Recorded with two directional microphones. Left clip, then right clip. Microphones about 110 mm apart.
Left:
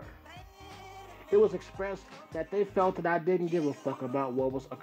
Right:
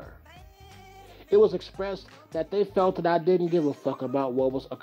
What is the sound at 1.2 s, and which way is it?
Speech, 30° right (ahead or behind).